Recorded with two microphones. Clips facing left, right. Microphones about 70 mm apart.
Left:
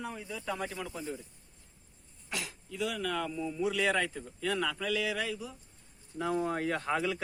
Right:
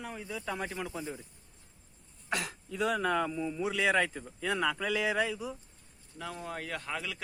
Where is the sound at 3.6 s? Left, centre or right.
Right.